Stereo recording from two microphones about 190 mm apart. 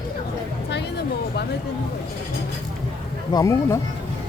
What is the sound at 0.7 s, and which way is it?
Music, 65° left (ahead or behind).